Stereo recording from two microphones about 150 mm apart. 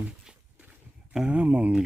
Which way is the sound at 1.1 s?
5° right (ahead or behind).